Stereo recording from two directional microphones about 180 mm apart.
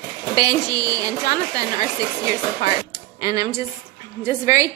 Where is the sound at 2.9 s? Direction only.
20° right (ahead or behind).